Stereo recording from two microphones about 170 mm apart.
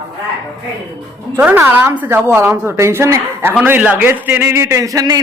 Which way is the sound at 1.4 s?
15° right (ahead or behind).